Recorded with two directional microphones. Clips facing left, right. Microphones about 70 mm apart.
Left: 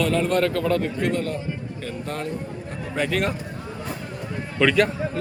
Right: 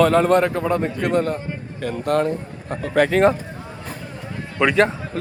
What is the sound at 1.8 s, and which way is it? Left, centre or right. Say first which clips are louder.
A man's voice: right 12 dB; right.